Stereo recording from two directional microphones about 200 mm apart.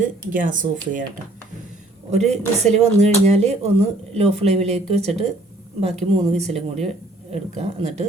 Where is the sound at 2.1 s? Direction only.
35° right (ahead or behind).